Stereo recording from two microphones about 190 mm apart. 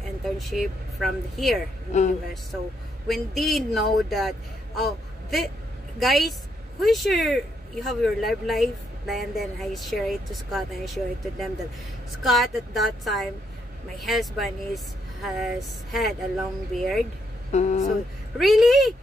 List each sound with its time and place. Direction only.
0.5 s speech: centre (ahead or behind)
1.9 s speech: 35° left (ahead or behind)
3.1 s a man's voice: centre (ahead or behind)
17.5 s speech: 35° left (ahead or behind)
18.4 s speech: centre (ahead or behind)